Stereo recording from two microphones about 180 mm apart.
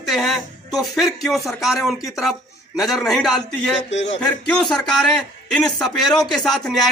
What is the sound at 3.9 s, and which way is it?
Music, 90° left.